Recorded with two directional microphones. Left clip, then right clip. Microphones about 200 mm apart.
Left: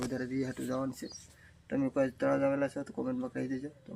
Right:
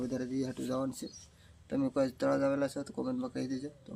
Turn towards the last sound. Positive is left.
turn(degrees=-5)  # may be behind; listen again after turning